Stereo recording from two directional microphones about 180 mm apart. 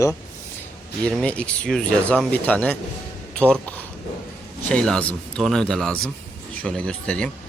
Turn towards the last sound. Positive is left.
turn(degrees=5)  # may be behind; listen again after turning